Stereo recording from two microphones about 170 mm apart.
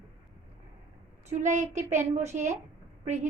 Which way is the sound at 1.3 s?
45° right (ahead or behind).